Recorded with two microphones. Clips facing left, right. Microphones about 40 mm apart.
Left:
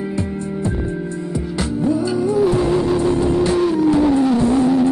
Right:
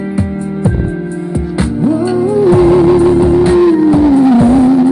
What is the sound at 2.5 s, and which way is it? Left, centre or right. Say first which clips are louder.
Music: right 10 dB; right.